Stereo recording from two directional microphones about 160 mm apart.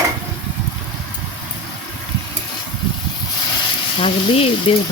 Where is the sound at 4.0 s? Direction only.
35° left (ahead or behind).